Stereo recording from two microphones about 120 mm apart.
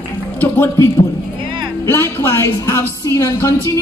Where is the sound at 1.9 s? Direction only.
20° left (ahead or behind).